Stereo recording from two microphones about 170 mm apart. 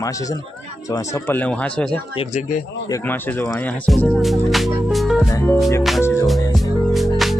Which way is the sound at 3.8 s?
Centre (ahead or behind).